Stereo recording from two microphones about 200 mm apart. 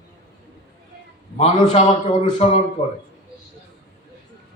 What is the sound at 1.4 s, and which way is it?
A man's voice, 30° left (ahead or behind).